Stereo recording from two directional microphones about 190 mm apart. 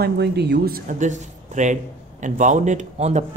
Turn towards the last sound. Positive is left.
turn(degrees=-35)  # may be behind; listen again after turning